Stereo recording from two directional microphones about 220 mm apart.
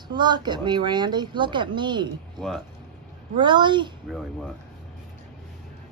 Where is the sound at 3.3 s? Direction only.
20° right (ahead or behind).